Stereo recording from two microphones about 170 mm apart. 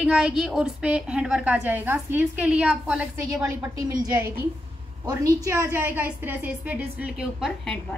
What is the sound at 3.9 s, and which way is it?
A woman's voice, 20° right (ahead or behind).